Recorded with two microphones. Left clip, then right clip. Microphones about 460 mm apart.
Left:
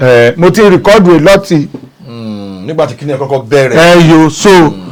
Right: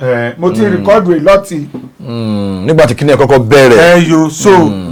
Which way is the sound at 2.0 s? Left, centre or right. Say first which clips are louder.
Right 7 dB; right.